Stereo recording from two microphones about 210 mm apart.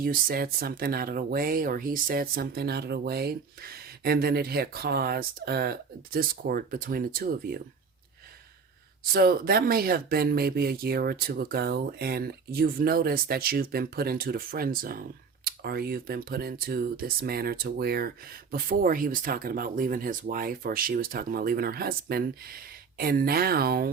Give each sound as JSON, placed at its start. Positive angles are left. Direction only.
{"t": 0.0, "sound": "speech", "side_deg": -45}
{"t": 9.1, "sound": "speech", "side_deg": -45}